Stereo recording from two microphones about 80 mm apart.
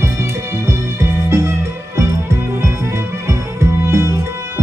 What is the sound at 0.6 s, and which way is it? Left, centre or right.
Music, right.